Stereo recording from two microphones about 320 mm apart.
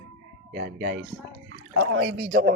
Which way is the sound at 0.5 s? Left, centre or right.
Right.